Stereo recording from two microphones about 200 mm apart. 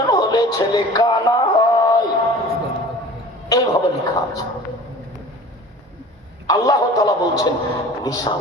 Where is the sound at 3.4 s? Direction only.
15° left (ahead or behind).